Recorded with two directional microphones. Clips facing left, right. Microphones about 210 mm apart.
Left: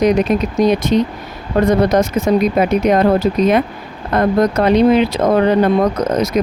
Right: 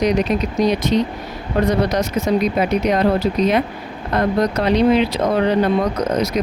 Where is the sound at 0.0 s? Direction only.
50° left (ahead or behind).